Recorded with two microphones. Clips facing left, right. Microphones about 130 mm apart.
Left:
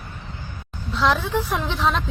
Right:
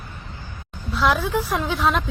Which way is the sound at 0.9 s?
10° right (ahead or behind).